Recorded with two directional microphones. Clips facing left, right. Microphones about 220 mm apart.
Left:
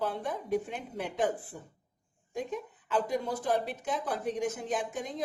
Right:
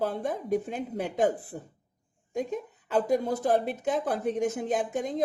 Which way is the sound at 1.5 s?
50° right (ahead or behind).